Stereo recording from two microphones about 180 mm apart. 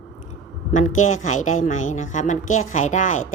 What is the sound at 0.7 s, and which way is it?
A woman's voice, 45° left (ahead or behind).